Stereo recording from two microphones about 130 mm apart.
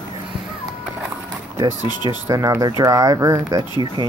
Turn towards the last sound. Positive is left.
turn(degrees=-25)  # may be behind; listen again after turning